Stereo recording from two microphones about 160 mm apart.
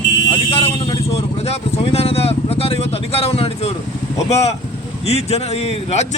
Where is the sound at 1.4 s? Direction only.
40° left (ahead or behind).